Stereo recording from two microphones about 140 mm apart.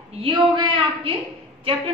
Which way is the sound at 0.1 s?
40° right (ahead or behind).